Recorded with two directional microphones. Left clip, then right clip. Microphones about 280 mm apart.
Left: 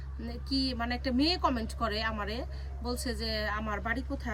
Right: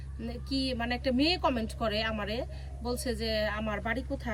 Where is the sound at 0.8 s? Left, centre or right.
Centre.